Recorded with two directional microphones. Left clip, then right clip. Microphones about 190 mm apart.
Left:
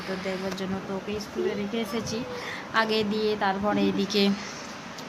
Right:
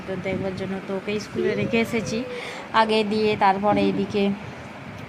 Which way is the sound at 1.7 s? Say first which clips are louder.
Right 8 dB; 25° right (ahead or behind).